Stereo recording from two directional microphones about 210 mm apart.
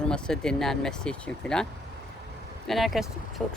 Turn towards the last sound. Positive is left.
turn(degrees=5)  # may be behind; listen again after turning